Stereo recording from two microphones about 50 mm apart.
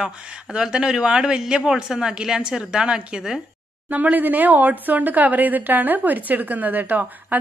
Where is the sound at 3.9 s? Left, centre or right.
Right.